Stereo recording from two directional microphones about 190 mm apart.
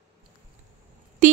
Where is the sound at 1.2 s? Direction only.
45° right (ahead or behind).